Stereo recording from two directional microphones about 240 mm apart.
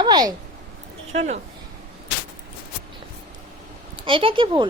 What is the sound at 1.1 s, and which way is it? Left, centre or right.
Speech, right.